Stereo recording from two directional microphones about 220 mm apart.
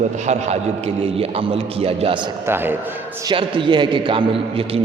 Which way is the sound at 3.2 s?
20° right (ahead or behind).